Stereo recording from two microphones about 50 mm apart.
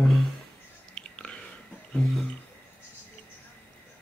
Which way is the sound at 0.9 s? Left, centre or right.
Centre.